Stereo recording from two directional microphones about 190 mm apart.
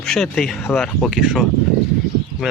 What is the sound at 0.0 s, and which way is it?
Speech, centre (ahead or behind).